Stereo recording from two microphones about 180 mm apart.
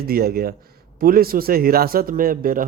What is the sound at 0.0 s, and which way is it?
A man's voice, 60° right (ahead or behind).